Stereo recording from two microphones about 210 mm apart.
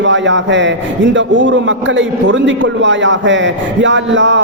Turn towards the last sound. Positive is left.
turn(degrees=-60)  # may be behind; listen again after turning